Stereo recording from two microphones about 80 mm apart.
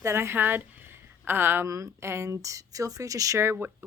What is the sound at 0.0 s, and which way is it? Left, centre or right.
A woman's voice, right.